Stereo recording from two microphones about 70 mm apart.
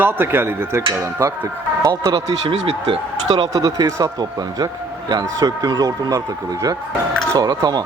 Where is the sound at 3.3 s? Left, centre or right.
Right.